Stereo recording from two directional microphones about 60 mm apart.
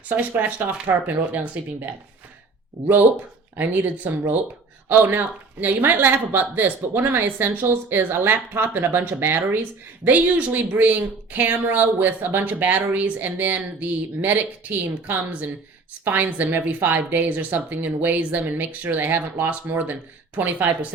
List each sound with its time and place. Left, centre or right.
0.1 s speech: right
3.6 s speech: right
10.0 s speech: right